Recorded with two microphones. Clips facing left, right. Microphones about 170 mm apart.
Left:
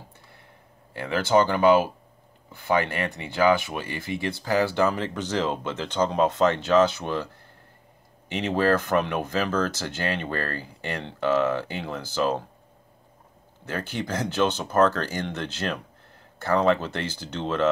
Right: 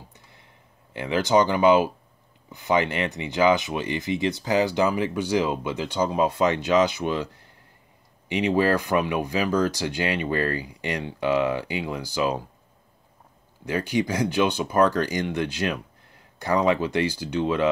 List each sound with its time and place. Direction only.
0.9 s speech: 15° right (ahead or behind)
8.3 s speech: 15° right (ahead or behind)
13.7 s speech: 15° right (ahead or behind)